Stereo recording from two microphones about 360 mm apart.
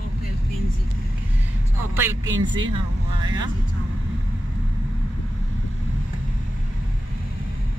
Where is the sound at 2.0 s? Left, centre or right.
Centre.